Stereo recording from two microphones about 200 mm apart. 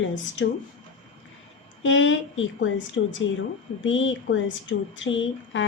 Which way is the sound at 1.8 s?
70° left (ahead or behind).